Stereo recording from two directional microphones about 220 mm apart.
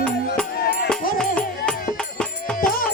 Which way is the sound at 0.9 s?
5° left (ahead or behind).